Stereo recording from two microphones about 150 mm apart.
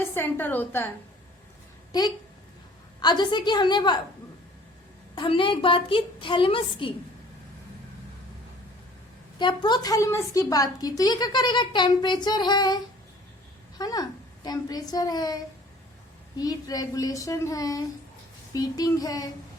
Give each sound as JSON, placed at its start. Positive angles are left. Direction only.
{"t": 0.0, "sound": "a woman's voice", "side_deg": 15}
{"t": 1.9, "sound": "a woman's voice", "side_deg": 30}
{"t": 5.1, "sound": "a woman's voice", "side_deg": 35}
{"t": 9.4, "sound": "a woman's voice", "side_deg": 30}
{"t": 16.4, "sound": "a woman's voice", "side_deg": 25}